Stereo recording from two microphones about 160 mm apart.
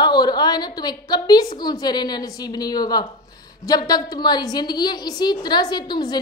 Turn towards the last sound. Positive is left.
turn(degrees=25)  # may be behind; listen again after turning